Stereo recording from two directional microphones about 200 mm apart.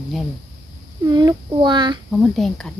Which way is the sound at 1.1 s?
20° right (ahead or behind).